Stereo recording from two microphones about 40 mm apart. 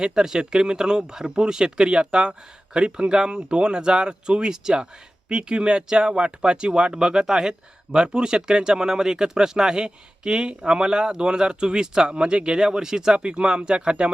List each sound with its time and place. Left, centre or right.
0.0 s speech: centre